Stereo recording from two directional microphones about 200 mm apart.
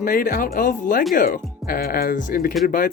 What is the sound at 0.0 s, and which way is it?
Speech, 45° left (ahead or behind).